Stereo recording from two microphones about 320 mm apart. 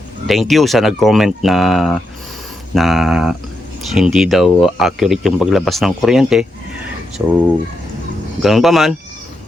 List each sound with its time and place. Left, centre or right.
0.3 s speech: centre
8.4 s speech: centre